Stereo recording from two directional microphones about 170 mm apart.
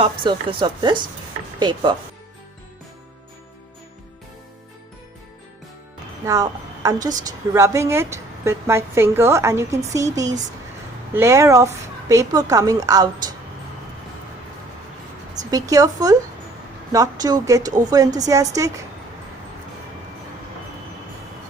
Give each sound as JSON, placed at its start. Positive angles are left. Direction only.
{"t": 0.0, "sound": "speech", "side_deg": -25}
{"t": 6.2, "sound": "a woman's voice", "side_deg": -20}
{"t": 15.4, "sound": "speech", "side_deg": -20}